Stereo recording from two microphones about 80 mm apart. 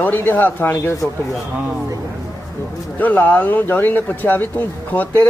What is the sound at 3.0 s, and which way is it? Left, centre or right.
Speech, left.